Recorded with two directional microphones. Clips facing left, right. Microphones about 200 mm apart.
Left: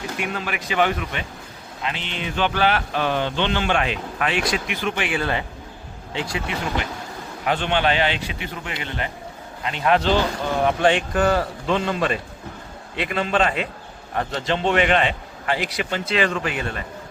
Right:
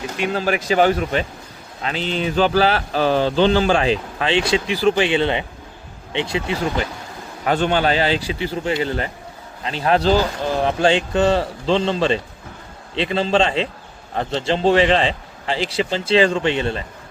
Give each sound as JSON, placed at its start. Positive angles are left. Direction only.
{"t": 0.2, "sound": "a man's voice", "side_deg": -30}
{"t": 7.4, "sound": "a man's voice", "side_deg": -40}